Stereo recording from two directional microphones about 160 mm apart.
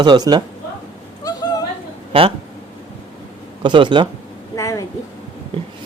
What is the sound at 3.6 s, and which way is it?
Speech, 30° right (ahead or behind).